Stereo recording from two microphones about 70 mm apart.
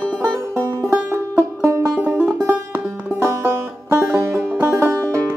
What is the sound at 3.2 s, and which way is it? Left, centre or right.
Music, right.